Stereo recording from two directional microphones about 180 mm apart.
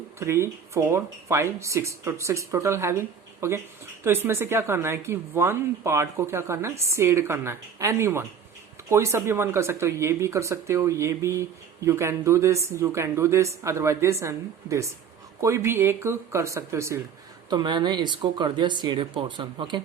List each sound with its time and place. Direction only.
0.2 s a woman's voice: 15° right (ahead or behind)